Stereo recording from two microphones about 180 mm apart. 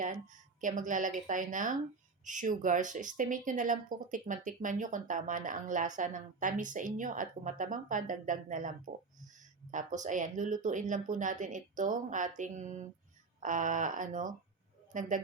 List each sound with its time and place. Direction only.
0.6 s speech: 45° right (ahead or behind)